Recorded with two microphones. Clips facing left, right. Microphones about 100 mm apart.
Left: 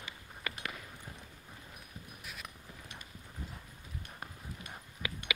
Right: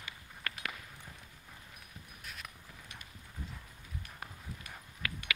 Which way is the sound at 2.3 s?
5° left (ahead or behind).